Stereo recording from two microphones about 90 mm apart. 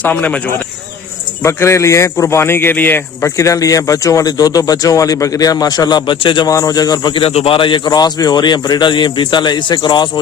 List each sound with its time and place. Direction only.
0.0 s speech: 20° left (ahead or behind)
1.4 s a man's voice: 30° left (ahead or behind); by 6.5 s 60° left (ahead or behind)
6.5 s a man's voice: 40° left (ahead or behind); by 10.1 s 55° left (ahead or behind)